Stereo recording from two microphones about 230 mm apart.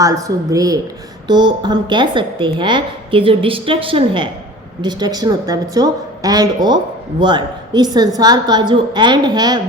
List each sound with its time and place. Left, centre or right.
0.0 s a woman's voice: centre